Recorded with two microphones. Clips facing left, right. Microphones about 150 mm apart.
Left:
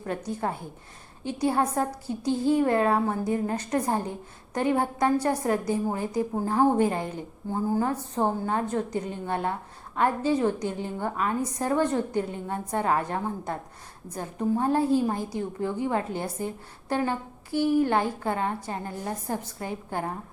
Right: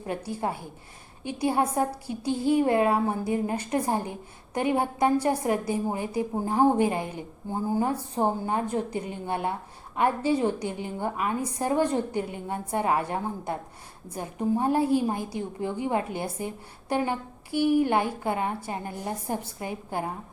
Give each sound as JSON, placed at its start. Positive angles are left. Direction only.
{"t": 0.0, "sound": "a woman's voice", "side_deg": -10}